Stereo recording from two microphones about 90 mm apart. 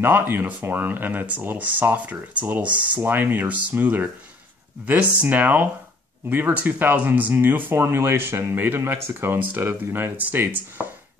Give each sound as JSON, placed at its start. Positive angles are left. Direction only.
{"t": 0.0, "sound": "speech", "side_deg": -20}